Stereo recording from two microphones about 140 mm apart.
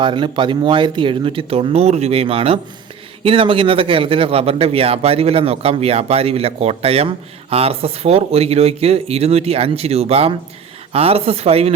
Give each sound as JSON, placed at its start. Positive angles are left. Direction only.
{"t": 0.0, "sound": "a man's voice", "side_deg": -35}